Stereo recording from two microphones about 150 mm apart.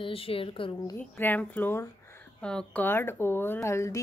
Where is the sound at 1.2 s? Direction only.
10° left (ahead or behind).